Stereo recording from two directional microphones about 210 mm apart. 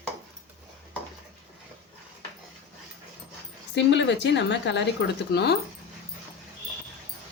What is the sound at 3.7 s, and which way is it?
A woman's voice, 55° left (ahead or behind).